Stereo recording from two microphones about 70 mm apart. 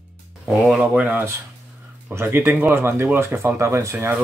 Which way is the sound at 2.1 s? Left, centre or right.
Right.